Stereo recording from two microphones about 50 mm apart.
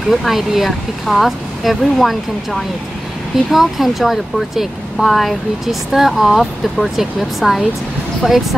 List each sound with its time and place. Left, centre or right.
0.1 s speech: centre